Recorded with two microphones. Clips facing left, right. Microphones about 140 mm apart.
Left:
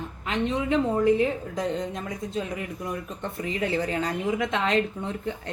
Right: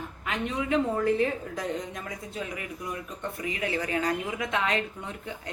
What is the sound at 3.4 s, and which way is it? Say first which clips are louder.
A woman's voice: left 4 dB; 30° left (ahead or behind).